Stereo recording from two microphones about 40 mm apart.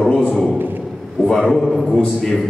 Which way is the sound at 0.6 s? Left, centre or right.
Right.